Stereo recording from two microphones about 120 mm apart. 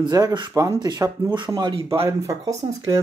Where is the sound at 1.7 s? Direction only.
50° right (ahead or behind).